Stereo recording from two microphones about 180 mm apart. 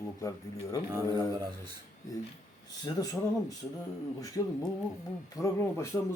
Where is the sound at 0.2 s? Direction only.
20° left (ahead or behind).